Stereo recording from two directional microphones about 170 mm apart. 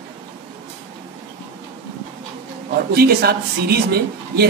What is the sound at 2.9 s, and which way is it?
Speech, 65° right (ahead or behind).